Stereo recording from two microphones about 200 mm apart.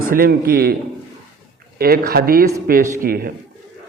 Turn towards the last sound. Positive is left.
turn(degrees=-45)  # may be behind; listen again after turning